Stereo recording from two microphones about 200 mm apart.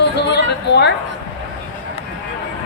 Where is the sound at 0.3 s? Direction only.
55° left (ahead or behind).